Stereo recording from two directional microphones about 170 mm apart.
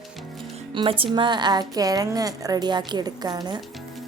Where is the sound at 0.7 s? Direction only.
30° right (ahead or behind).